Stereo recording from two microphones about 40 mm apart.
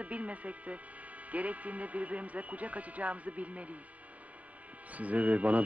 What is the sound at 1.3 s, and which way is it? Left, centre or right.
Speech, right.